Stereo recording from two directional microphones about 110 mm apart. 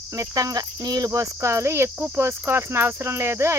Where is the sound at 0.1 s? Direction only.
30° right (ahead or behind).